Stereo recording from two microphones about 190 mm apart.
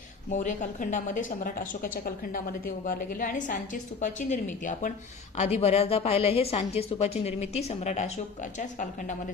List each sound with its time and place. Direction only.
0.3 s a woman's voice: 40° left (ahead or behind)